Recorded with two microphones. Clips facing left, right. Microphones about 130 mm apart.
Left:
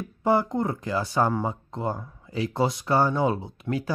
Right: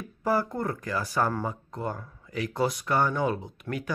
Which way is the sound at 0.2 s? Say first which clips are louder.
Left 4 dB; 25° left (ahead or behind).